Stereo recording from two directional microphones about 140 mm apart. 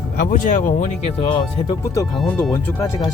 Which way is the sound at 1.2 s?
35° left (ahead or behind).